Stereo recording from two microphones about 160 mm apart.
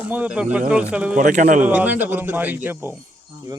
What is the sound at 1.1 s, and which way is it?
Speech, 50° right (ahead or behind).